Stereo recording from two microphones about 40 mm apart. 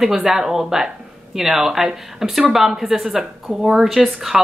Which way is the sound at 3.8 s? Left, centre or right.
Centre.